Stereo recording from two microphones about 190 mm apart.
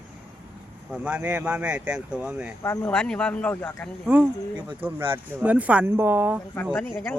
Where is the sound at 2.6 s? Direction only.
10° left (ahead or behind).